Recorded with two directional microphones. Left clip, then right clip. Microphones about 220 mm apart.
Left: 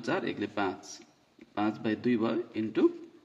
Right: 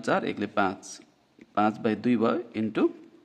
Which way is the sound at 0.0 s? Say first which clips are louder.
Right 5 dB; 40° right (ahead or behind).